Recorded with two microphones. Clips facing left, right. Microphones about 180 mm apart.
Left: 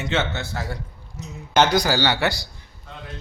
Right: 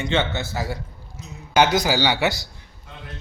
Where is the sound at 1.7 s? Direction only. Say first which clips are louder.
Even; 15° right (ahead or behind).